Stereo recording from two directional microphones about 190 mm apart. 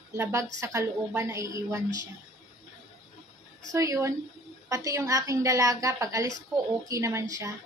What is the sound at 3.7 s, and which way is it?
A woman's voice, 15° right (ahead or behind).